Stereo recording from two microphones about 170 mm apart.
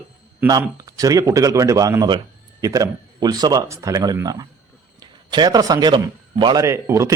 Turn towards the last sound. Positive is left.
turn(degrees=-15)  # may be behind; listen again after turning